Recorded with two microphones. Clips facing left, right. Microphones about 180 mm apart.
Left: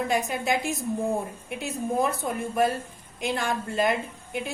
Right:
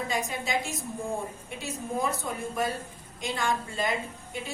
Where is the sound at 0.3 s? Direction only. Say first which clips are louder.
Left 5 dB; 60° left (ahead or behind).